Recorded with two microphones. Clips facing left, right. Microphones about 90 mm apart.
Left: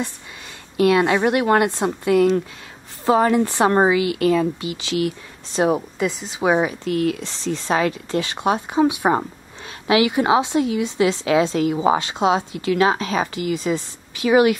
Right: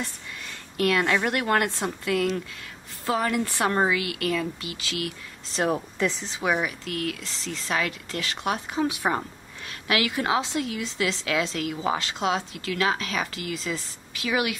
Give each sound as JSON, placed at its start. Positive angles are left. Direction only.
{"t": 0.7, "sound": "a woman's voice", "side_deg": 20}
{"t": 6.4, "sound": "a woman's voice", "side_deg": 25}